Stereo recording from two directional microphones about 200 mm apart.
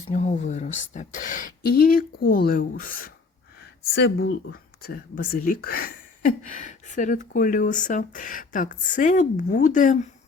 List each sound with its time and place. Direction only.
0.1 s speech: 35° left (ahead or behind)